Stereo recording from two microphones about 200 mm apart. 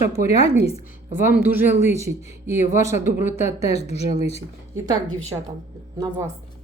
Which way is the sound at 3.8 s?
30° left (ahead or behind).